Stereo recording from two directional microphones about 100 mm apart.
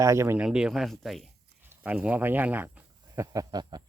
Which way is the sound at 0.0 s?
30° right (ahead or behind).